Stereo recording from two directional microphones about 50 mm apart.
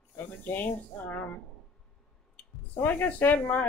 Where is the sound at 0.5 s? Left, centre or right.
Left.